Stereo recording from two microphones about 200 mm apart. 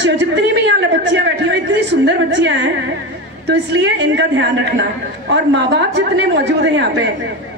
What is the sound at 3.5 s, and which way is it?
A woman's voice, 60° right (ahead or behind).